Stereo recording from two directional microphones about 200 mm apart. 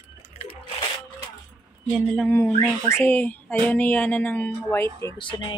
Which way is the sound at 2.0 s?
Centre (ahead or behind).